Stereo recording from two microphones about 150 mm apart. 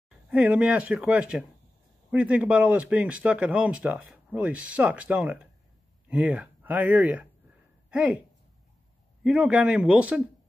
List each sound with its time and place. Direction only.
0.3 s speech: 10° right (ahead or behind)
9.2 s speech: 5° right (ahead or behind)